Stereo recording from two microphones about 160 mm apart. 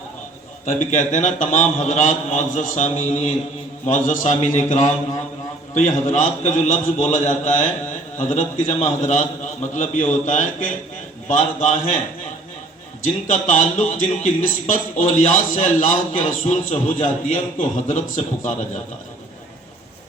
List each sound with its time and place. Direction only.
0.6 s speech: 50° left (ahead or behind)
6.1 s speech: 50° left (ahead or behind)
13.2 s speech: 50° left (ahead or behind)